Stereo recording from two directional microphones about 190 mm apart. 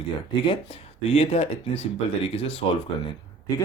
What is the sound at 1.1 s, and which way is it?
Speech, 35° left (ahead or behind).